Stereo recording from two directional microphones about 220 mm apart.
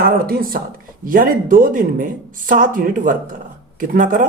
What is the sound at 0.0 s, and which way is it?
Speech, 40° right (ahead or behind).